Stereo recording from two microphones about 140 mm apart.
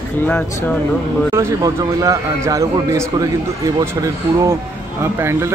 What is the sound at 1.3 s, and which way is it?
A man's voice, 25° right (ahead or behind).